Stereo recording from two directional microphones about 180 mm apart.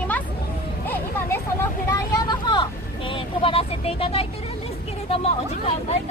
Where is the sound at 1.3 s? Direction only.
15° left (ahead or behind).